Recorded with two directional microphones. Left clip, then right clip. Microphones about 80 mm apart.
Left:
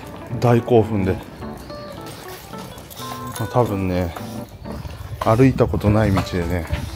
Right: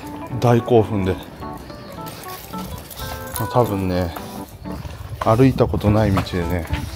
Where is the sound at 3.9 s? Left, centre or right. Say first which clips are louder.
Right 1 dB; centre.